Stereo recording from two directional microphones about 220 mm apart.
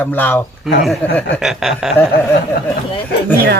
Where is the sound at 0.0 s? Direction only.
10° left (ahead or behind).